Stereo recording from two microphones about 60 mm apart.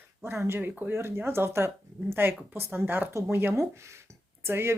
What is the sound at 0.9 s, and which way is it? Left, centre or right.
Speech, right.